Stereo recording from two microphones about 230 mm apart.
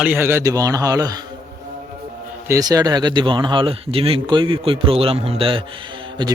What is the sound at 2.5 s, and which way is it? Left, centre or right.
A man's voice, centre.